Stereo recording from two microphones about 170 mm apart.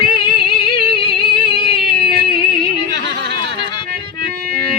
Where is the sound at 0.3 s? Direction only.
30° left (ahead or behind).